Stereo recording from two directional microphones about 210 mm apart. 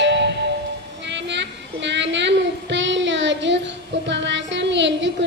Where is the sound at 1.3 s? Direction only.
60° right (ahead or behind).